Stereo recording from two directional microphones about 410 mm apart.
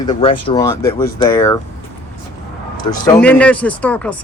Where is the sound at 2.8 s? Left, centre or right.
Centre.